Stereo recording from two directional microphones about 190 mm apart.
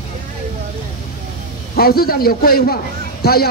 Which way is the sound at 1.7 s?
55° left (ahead or behind).